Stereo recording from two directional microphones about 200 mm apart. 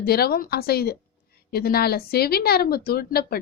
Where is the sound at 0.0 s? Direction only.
50° left (ahead or behind).